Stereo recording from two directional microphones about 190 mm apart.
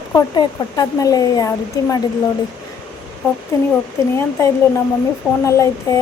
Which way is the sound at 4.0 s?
15° left (ahead or behind).